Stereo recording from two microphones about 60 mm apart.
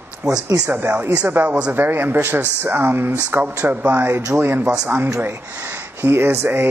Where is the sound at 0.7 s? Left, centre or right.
Right.